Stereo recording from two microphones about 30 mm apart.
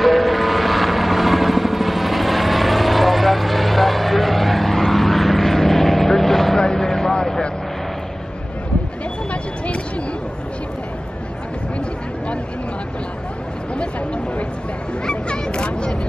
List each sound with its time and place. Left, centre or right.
0.0 s vehicle: centre
6.6 s vehicle: left
15.4 s a sound: left